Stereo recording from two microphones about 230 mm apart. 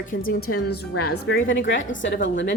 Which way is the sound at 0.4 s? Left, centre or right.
Left.